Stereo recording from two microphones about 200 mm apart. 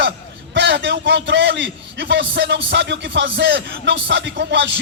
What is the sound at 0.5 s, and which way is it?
A man's voice, 60° right (ahead or behind).